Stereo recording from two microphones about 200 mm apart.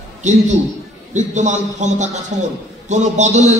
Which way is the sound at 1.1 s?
35° right (ahead or behind).